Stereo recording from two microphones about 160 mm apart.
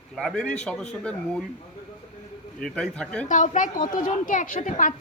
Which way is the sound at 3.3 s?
55° left (ahead or behind).